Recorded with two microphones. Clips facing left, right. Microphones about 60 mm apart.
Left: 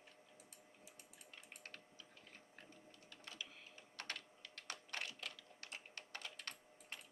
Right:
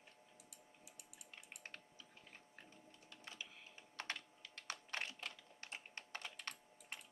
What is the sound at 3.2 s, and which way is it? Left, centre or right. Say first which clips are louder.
Typing: even; right.